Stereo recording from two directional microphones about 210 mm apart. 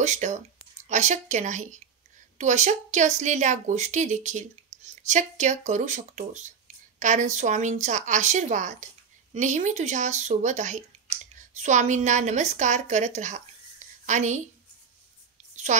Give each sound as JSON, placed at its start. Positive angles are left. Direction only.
{"t": 0.0, "sound": "a woman's voice", "side_deg": -35}